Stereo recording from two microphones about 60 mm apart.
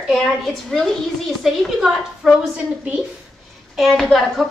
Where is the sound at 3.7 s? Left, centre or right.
Centre.